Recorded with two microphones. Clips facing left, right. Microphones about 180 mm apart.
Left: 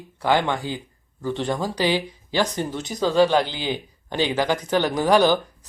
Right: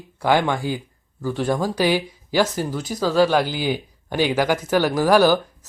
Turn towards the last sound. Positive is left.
turn(degrees=-5)  # may be behind; listen again after turning